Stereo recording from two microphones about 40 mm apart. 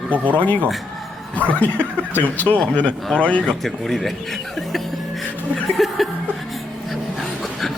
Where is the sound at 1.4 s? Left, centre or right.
Left.